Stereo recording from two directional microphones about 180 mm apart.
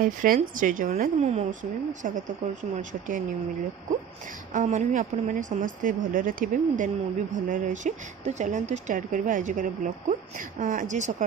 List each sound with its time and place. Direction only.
0.0 s a woman's voice: 50° right (ahead or behind)
4.6 s a woman's voice: 40° right (ahead or behind)